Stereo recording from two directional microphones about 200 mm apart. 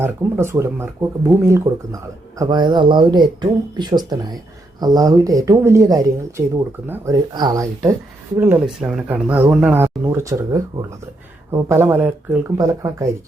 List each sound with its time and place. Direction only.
0.0 s speech: 10° right (ahead or behind)